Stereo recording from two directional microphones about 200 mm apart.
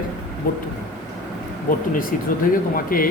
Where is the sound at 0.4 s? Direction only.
45° left (ahead or behind).